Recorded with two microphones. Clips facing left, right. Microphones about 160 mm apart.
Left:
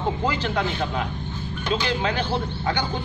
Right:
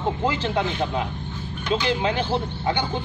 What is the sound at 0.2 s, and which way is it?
Speech, 25° right (ahead or behind).